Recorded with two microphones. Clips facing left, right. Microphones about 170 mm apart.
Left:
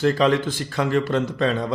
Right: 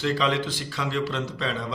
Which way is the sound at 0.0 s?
45° left (ahead or behind).